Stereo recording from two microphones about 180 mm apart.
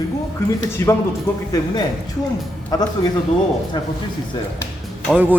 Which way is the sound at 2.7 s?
20° left (ahead or behind).